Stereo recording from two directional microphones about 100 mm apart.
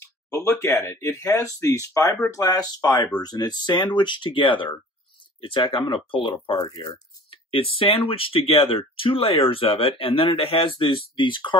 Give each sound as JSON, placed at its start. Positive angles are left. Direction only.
{"t": 0.3, "sound": "a sound", "side_deg": 30}
{"t": 0.6, "sound": "speech", "side_deg": 25}
{"t": 6.7, "sound": "speech", "side_deg": 45}
{"t": 7.2, "sound": "speech", "side_deg": 65}